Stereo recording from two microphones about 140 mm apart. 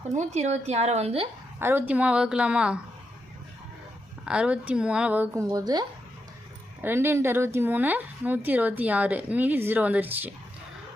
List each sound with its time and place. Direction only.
0.1 s speech: 55° right (ahead or behind)
1.5 s a woman's voice: 15° right (ahead or behind)
4.3 s a woman's voice: 5° right (ahead or behind)
5.3 s a woman's voice: 25° right (ahead or behind)
6.8 s a woman's voice: 15° right (ahead or behind)